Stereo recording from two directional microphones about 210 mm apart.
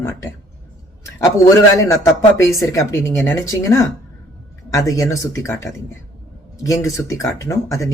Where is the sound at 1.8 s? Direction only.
15° left (ahead or behind).